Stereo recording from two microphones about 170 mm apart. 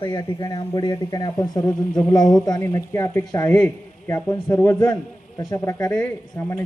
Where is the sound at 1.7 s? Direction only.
10° left (ahead or behind).